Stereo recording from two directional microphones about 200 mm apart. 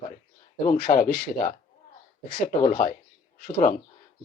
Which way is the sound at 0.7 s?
45° left (ahead or behind).